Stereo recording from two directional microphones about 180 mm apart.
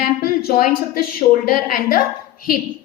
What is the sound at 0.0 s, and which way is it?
A woman's voice, 55° left (ahead or behind).